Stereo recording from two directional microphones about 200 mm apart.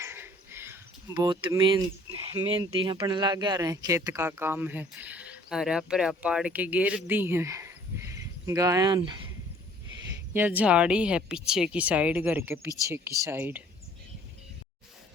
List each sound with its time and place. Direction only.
0.0 s a sound: 10° right (ahead or behind)
2.2 s speech: 25° right (ahead or behind)
10.3 s speech: 10° right (ahead or behind)